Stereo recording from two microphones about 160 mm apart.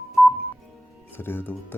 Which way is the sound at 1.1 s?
15° left (ahead or behind).